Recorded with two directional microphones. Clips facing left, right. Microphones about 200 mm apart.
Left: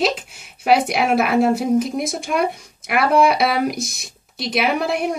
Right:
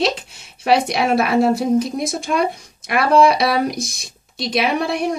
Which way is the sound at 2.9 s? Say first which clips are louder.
Right 2 dB; 5° left (ahead or behind).